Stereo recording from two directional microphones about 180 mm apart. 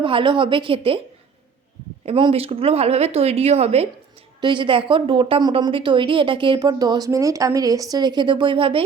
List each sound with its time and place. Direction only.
0.0 s a woman's voice: 30° right (ahead or behind)
2.0 s a woman's voice: 30° right (ahead or behind)